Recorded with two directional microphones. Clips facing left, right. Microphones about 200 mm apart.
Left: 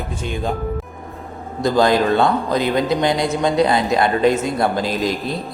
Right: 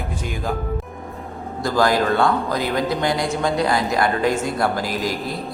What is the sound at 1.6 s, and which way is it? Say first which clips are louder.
A man's voice: left 3 dB; 20° left (ahead or behind).